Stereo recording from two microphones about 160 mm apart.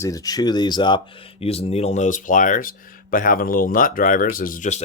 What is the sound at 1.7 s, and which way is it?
Speech, 40° left (ahead or behind).